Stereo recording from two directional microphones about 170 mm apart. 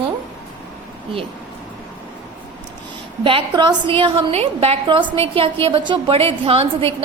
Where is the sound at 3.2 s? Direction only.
30° right (ahead or behind).